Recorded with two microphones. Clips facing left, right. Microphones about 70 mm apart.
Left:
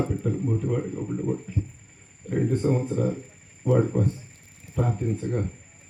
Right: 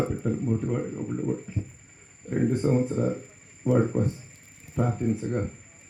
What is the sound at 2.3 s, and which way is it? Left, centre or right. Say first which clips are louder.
Speech: even; centre.